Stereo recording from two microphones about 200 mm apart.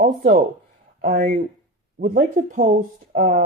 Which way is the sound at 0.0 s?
45° right (ahead or behind).